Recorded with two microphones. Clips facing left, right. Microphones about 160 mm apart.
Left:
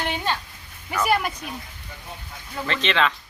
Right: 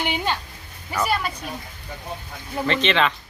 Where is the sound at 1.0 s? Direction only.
10° left (ahead or behind).